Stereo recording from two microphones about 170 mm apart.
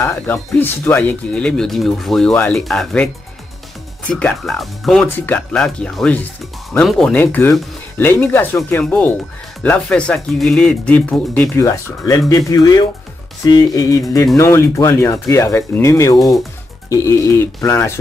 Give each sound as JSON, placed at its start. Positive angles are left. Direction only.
{"t": 0.0, "sound": "speech", "side_deg": 15}
{"t": 4.1, "sound": "speech", "side_deg": 5}